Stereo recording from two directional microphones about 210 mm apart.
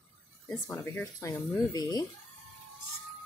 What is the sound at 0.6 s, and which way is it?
A woman's voice, 10° left (ahead or behind).